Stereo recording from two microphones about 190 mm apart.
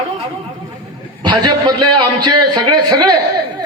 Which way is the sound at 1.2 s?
20° right (ahead or behind).